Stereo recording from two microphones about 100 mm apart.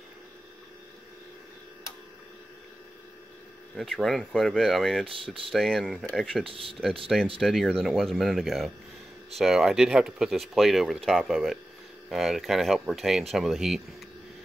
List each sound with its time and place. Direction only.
3.7 s speech: 5° left (ahead or behind)
6.4 s speech: 65° right (ahead or behind)
7.3 s speech: 5° left (ahead or behind)